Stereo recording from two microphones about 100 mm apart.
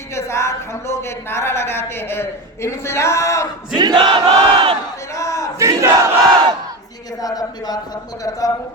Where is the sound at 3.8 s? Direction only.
50° right (ahead or behind).